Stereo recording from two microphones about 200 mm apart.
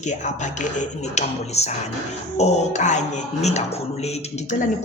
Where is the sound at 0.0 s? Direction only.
35° left (ahead or behind).